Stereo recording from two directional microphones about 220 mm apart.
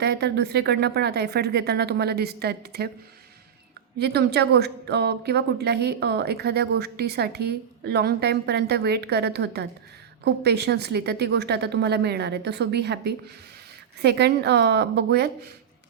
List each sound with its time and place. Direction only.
0.0 s a woman's voice: 50° right (ahead or behind)
3.9 s a woman's voice: 50° right (ahead or behind)